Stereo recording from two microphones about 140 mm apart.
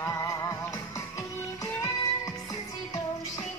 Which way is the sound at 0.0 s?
25° left (ahead or behind).